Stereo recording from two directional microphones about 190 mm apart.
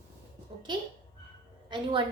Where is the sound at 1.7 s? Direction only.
25° right (ahead or behind).